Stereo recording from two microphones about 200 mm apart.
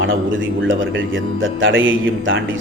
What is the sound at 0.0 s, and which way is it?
A man's voice, 75° right (ahead or behind).